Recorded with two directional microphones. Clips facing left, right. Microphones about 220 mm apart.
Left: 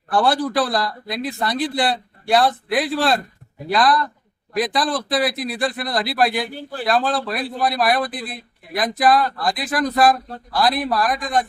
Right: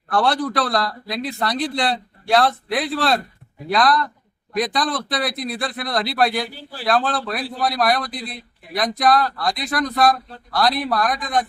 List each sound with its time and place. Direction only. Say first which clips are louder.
0.1 s a man's voice: left 1 dB; 5° left (ahead or behind)
6.5 s speech: left 6 dB; 50° left (ahead or behind)
6.8 s a man's voice: even; centre (ahead or behind)